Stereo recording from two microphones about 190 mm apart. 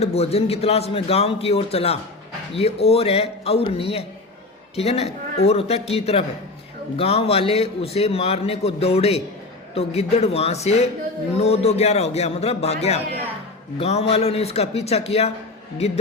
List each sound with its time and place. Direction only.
0.0 s a man's voice: 30° left (ahead or behind)